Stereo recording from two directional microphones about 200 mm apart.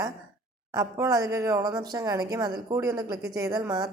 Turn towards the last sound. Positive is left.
turn(degrees=-20)  # may be behind; listen again after turning